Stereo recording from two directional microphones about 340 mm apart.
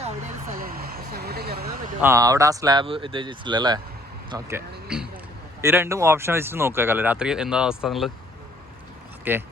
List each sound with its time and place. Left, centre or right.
0.6 s vehicle: right
2.0 s speech: centre
9.3 s speech: centre